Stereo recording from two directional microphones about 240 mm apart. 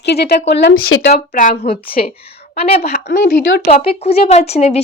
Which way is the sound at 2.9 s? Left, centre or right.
Left.